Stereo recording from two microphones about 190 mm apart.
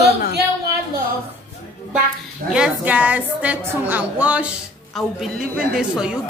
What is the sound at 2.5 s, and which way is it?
A woman's voice, 5° right (ahead or behind).